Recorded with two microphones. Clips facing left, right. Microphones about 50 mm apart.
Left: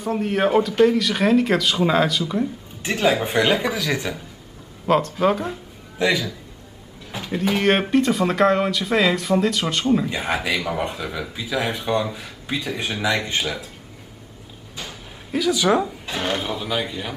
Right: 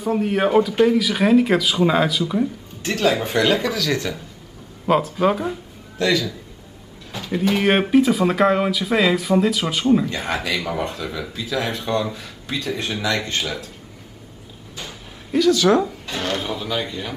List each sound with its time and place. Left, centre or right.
0.0 s speech: centre
2.8 s speech: centre
4.8 s speech: centre
5.9 s speech: centre
7.1 s a sound: centre
7.3 s speech: centre
10.0 s speech: centre
14.8 s speech: centre